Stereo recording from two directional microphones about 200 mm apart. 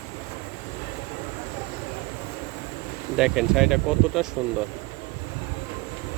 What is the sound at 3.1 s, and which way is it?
Speech, 5° right (ahead or behind).